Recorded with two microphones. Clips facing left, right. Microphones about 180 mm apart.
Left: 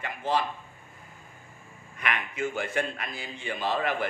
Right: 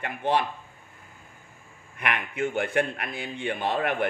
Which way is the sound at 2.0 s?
60° right (ahead or behind).